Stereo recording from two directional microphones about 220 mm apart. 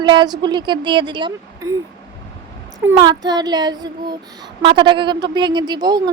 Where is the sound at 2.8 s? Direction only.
15° right (ahead or behind).